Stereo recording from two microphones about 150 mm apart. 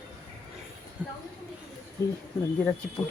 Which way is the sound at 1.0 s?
10° right (ahead or behind).